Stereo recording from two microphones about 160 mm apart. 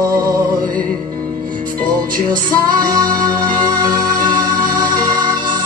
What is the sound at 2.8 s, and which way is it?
Music, 25° right (ahead or behind).